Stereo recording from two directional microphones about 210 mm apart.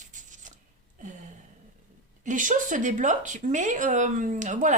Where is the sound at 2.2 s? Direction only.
35° right (ahead or behind).